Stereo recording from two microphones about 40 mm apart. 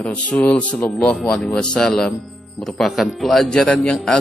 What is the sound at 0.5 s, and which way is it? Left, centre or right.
Speech, left.